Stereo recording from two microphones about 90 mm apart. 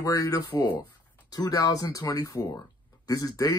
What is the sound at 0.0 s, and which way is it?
Speech, 40° left (ahead or behind).